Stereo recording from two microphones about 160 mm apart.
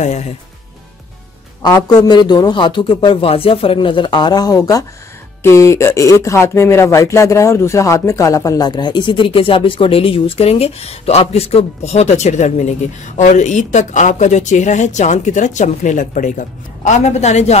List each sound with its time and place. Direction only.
1.6 s a man's voice: 25° left (ahead or behind); by 17.6 s 45° left (ahead or behind)